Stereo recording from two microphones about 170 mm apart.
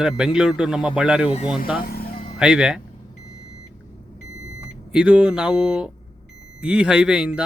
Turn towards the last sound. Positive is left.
turn(degrees=-5)  # may be behind; listen again after turning